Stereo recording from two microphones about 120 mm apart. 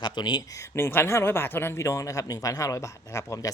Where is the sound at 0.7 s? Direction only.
20° left (ahead or behind).